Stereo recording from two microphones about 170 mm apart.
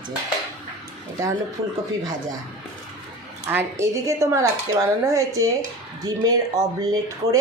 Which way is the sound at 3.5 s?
15° right (ahead or behind).